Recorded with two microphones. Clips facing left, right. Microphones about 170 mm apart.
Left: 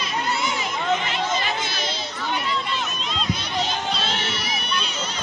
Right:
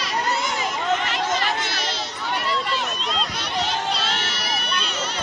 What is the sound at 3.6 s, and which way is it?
Music, 70° right (ahead or behind).